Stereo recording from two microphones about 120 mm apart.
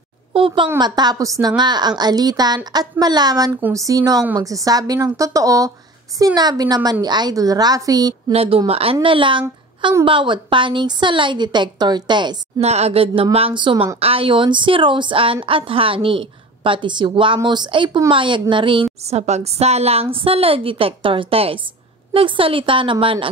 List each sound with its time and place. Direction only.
0.3 s a child's voice: 45° right (ahead or behind); by 8.1 s 30° right (ahead or behind)
8.3 s a woman's voice: 55° right (ahead or behind); by 12.4 s 40° right (ahead or behind)
12.5 s speech: 65° right (ahead or behind); by 18.9 s 45° right (ahead or behind)
19.0 s speech: 65° right (ahead or behind); by 23.3 s 45° right (ahead or behind)